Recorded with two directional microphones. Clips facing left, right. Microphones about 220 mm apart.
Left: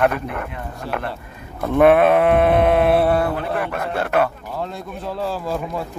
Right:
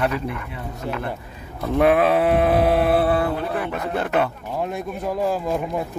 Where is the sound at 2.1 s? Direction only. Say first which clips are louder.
Left 3 dB; 55° left (ahead or behind).